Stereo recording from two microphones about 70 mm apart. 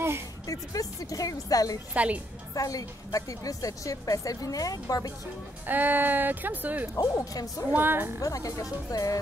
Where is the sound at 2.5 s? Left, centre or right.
Left.